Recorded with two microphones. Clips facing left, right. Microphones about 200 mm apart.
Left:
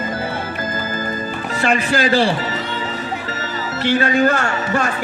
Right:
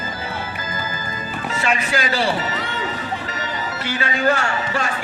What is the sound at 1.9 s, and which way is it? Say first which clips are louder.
Speech: left 6 dB; 35° left (ahead or behind).